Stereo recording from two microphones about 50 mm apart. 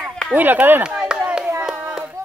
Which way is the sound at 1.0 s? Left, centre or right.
Centre.